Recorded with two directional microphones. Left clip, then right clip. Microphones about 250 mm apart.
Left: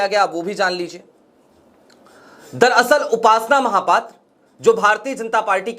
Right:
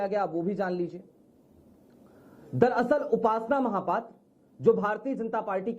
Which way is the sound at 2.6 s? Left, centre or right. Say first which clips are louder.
Left 11 dB; centre.